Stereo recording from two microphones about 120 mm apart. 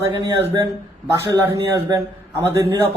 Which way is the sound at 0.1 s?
35° right (ahead or behind).